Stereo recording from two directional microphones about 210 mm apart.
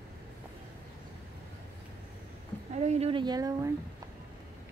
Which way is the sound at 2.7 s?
30° right (ahead or behind).